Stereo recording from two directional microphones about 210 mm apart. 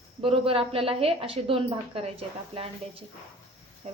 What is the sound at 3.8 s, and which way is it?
Speech, 30° right (ahead or behind).